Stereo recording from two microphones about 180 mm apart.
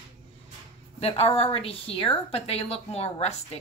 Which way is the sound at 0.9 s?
35° left (ahead or behind).